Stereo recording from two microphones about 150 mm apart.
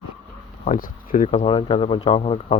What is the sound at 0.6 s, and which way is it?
Speech, 60° left (ahead or behind).